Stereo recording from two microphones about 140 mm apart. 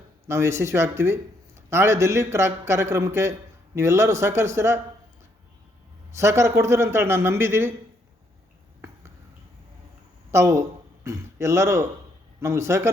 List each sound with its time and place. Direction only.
0.3 s a man's voice: 20° right (ahead or behind)
6.1 s speech: 20° right (ahead or behind)
10.3 s a man's voice: 20° right (ahead or behind)